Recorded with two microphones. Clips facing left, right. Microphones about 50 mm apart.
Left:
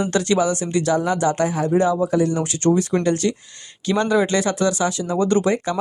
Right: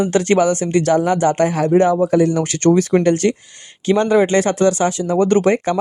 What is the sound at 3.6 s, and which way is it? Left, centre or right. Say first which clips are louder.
Speech: right 5 dB; right.